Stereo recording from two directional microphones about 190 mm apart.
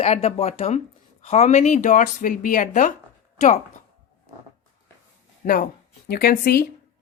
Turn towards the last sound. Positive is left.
turn(degrees=50)  # may be behind; listen again after turning